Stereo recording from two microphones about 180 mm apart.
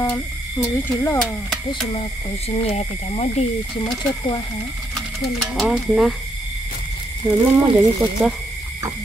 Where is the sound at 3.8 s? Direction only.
25° left (ahead or behind).